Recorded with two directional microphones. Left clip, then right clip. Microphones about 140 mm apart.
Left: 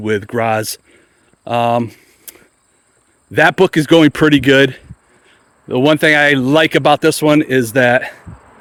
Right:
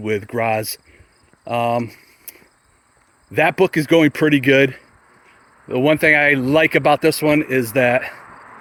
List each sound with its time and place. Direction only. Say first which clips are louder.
0.0 s speech: left 4 dB; 55° left (ahead or behind)
1.5 s a sound: left 5 dB; 55° left (ahead or behind)
3.3 s speech: left 5 dB; 65° left (ahead or behind); by 7.3 s 45° left (ahead or behind)
7.3 s speech: left 5 dB; 65° left (ahead or behind)